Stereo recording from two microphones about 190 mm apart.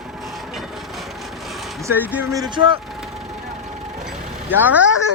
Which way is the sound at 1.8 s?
10° right (ahead or behind).